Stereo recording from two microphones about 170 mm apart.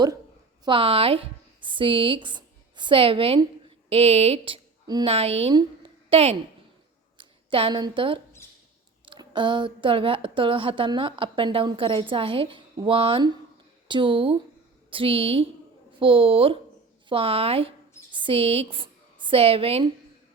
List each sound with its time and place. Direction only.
0.6 s a woman's voice: 30° right (ahead or behind)